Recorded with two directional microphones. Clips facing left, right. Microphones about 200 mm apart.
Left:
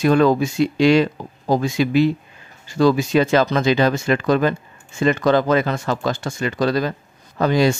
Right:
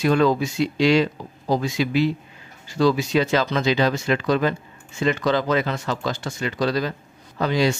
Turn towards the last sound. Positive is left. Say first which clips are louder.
# left 4 dB
turn(degrees=50)  # may be behind; listen again after turning